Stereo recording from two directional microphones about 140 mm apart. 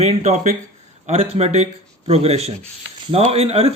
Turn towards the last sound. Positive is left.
turn(degrees=-45)  # may be behind; listen again after turning